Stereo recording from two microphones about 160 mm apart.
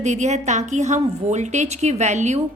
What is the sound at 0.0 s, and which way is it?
A woman's voice, 45° right (ahead or behind).